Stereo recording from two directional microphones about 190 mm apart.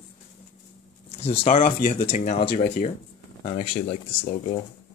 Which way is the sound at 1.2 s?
30° left (ahead or behind).